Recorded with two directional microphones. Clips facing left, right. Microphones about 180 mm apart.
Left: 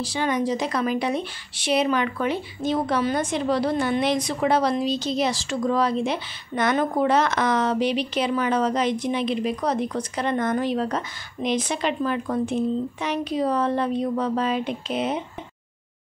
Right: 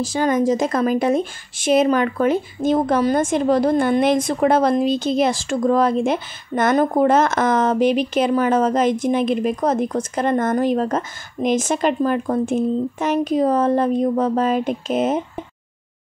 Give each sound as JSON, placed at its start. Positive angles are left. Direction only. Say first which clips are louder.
{"t": 0.0, "sound": "speech", "louder": "right 6 dB", "side_deg": -45}